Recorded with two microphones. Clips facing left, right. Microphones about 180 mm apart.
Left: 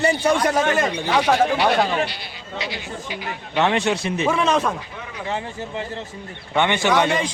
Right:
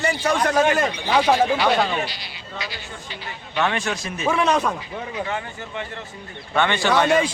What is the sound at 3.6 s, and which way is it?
Speech, 25° left (ahead or behind).